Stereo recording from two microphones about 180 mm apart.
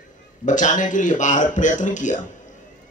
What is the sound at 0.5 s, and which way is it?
Speech, 45° left (ahead or behind).